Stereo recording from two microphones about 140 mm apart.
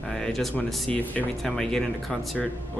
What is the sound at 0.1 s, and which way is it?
Speech, 5° left (ahead or behind).